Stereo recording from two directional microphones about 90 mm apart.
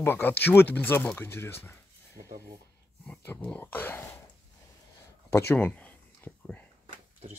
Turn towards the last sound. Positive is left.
turn(degrees=20)  # may be behind; listen again after turning